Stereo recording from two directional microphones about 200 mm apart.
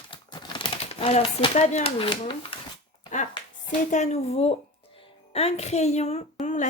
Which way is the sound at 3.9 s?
35° left (ahead or behind).